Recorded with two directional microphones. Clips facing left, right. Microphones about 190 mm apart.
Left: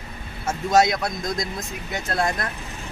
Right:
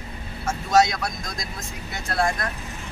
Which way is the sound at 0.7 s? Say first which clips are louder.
Left 1 dB; 20° left (ahead or behind).